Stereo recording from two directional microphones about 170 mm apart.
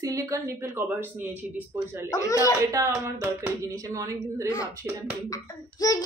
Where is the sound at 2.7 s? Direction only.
15° right (ahead or behind).